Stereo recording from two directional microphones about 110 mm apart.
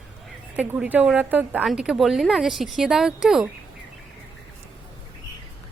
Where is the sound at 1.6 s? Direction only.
5° right (ahead or behind).